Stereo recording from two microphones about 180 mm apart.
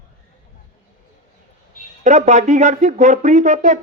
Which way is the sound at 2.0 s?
40° right (ahead or behind).